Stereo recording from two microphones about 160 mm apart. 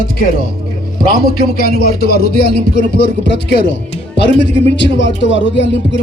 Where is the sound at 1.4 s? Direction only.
70° left (ahead or behind); by 3.7 s 90° left.